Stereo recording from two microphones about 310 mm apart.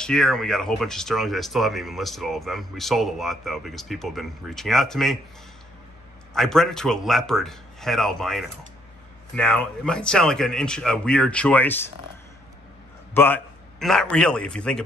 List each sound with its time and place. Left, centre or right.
0.0 s speech: centre
6.3 s speech: centre
13.1 s a man's voice: centre